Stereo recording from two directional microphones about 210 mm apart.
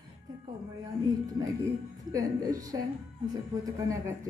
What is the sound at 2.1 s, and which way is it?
Speech, 15° right (ahead or behind).